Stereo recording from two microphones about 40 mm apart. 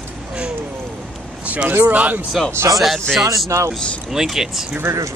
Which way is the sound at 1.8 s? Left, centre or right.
Right.